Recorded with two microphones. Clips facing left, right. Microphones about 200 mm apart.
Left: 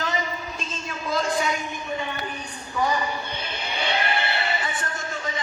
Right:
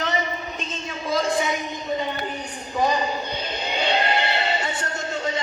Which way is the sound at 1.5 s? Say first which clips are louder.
Right 2 dB; 20° right (ahead or behind).